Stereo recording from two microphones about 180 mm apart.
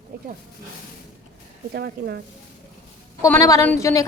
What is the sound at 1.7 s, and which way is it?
Speech, 70° right (ahead or behind).